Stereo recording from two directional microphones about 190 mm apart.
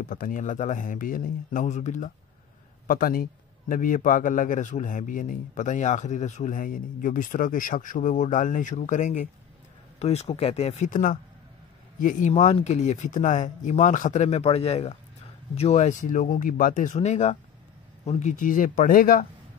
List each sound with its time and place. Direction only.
0.0 s a man's voice: 50° left (ahead or behind)